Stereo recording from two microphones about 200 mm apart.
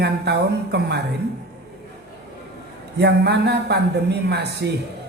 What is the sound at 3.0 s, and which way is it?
Speech, 55° right (ahead or behind).